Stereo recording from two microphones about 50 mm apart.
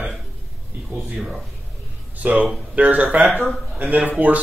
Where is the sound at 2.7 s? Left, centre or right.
Right.